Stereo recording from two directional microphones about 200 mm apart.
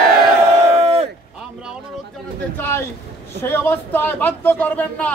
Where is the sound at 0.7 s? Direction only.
30° right (ahead or behind).